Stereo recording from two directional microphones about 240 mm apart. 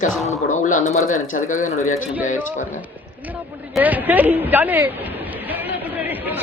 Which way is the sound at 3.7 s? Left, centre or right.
Centre.